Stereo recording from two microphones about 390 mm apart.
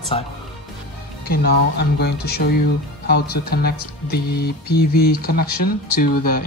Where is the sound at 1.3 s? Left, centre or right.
Left.